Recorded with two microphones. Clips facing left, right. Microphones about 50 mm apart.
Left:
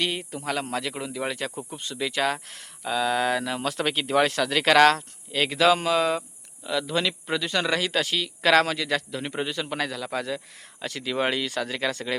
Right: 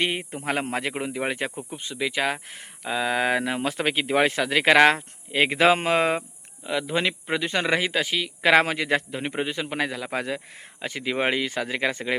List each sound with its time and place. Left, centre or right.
0.0 s speech: right
6.7 s speech: right